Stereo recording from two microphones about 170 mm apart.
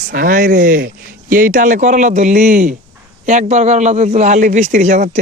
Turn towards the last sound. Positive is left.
turn(degrees=-45)  # may be behind; listen again after turning